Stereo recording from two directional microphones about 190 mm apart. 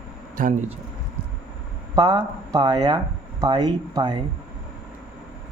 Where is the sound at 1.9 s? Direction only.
25° right (ahead or behind).